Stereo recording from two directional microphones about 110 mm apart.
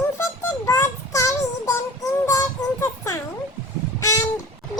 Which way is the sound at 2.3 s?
30° left (ahead or behind).